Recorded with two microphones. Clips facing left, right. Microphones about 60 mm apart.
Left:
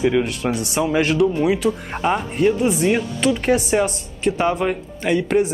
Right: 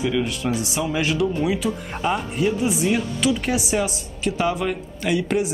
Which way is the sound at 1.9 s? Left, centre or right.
Left.